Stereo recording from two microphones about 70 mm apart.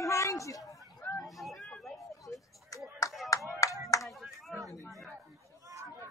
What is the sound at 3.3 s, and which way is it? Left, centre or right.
Clapping, left.